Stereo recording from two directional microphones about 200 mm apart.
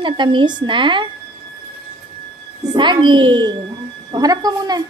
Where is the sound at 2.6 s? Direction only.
20° right (ahead or behind).